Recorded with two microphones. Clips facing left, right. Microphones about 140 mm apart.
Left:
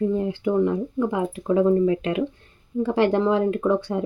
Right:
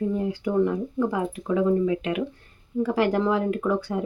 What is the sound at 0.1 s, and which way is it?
Speech, 25° left (ahead or behind).